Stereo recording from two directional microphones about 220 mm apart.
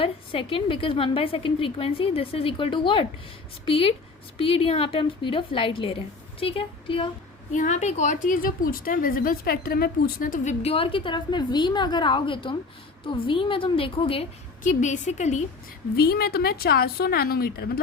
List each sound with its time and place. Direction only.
0.0 s a woman's voice: 25° left (ahead or behind)
7.5 s a woman's voice: 35° left (ahead or behind)
16.0 s a woman's voice: 45° left (ahead or behind)